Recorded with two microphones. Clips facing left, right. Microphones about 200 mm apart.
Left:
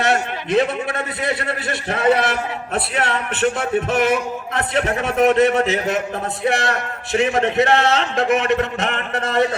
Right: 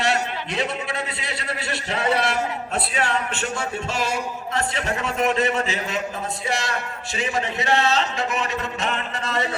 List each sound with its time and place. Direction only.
0.0 s a man's voice: 55° left (ahead or behind)